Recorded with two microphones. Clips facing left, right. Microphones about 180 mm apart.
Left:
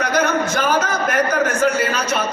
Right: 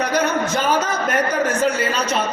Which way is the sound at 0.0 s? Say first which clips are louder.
Left 1 dB; 30° right (ahead or behind).